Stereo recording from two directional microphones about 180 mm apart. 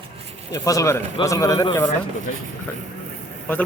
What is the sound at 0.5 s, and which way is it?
Speech, 20° left (ahead or behind).